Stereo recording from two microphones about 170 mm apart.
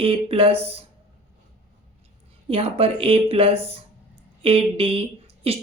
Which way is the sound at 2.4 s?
35° right (ahead or behind).